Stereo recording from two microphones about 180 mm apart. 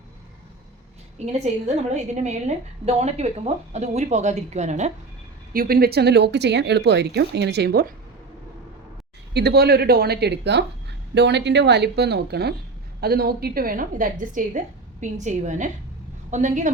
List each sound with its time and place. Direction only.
1.2 s a woman's voice: 35° right (ahead or behind)
5.5 s speech: 55° right (ahead or behind)
9.3 s a woman's voice: 65° right (ahead or behind); by 16.7 s 45° right (ahead or behind)